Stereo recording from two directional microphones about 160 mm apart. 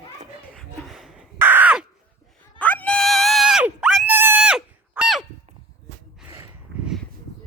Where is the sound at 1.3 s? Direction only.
15° right (ahead or behind).